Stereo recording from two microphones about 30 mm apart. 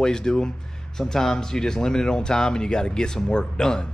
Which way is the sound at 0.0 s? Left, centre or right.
Left.